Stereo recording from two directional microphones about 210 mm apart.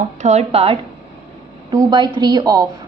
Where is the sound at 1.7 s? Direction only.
20° right (ahead or behind).